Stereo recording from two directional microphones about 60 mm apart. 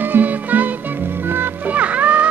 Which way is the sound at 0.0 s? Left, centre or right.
Right.